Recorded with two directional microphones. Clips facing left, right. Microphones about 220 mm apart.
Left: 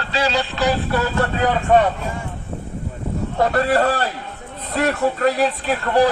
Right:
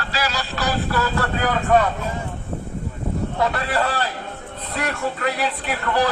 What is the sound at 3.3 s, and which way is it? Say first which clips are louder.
A man's voice: left 7 dB; 45° left (ahead or behind).